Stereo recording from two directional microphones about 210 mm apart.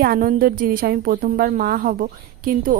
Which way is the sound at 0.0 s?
45° right (ahead or behind).